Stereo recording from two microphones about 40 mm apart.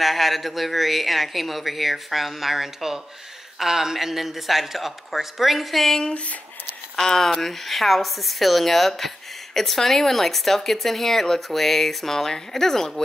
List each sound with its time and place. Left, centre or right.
0.0 s speech: centre
5.9 s speech: left
7.0 s speech: centre